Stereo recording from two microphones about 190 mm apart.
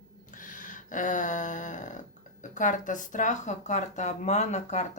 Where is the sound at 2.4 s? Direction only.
40° left (ahead or behind).